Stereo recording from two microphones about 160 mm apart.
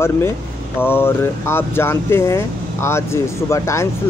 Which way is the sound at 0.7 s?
15° left (ahead or behind).